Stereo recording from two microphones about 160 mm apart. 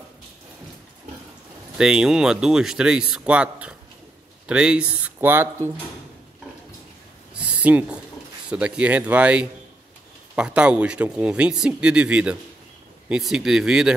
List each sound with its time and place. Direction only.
1.8 s a man's voice: 5° right (ahead or behind)
7.3 s a sound: 10° right (ahead or behind)
8.5 s a man's voice: 5° right (ahead or behind)